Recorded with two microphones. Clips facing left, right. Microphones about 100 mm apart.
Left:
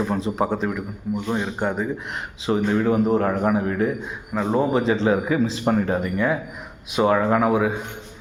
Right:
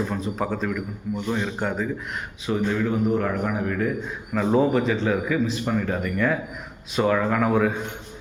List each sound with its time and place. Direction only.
0.3 s a man's voice: 25° left (ahead or behind)
2.5 s a man's voice: 35° left (ahead or behind)
4.4 s speech: 5° left (ahead or behind)
4.7 s a man's voice: 25° left (ahead or behind)
5.6 s a man's voice: 35° left (ahead or behind)
6.0 s a man's voice: 15° left (ahead or behind)
7.4 s speech: 15° left (ahead or behind)